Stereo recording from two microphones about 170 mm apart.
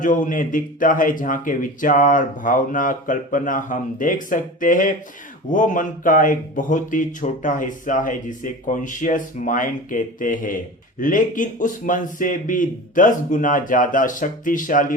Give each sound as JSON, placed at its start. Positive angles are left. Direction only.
{"t": 0.0, "sound": "speech", "side_deg": 50}